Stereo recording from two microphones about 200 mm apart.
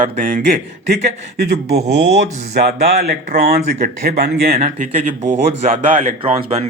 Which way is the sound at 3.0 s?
50° right (ahead or behind).